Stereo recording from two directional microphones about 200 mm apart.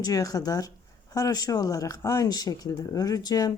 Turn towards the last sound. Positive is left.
turn(degrees=20)  # may be behind; listen again after turning